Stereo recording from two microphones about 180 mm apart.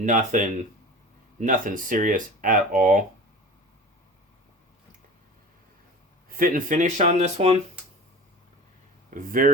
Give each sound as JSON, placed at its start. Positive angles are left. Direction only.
{"t": 0.0, "sound": "speech", "side_deg": -45}
{"t": 6.2, "sound": "speech", "side_deg": -50}
{"t": 9.0, "sound": "speech", "side_deg": -50}